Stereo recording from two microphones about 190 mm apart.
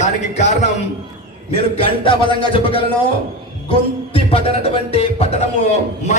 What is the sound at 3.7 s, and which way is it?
Music, 30° left (ahead or behind).